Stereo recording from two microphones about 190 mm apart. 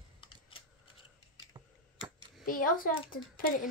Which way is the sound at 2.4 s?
50° left (ahead or behind).